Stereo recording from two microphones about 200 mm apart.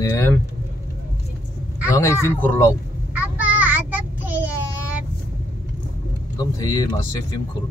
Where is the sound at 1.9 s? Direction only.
15° left (ahead or behind).